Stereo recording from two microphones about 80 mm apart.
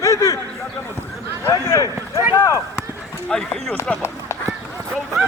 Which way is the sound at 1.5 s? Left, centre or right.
Left.